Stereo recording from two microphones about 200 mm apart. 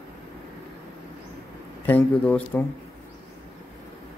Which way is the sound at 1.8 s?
10° left (ahead or behind).